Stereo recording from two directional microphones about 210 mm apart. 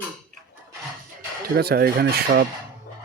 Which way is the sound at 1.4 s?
45° right (ahead or behind).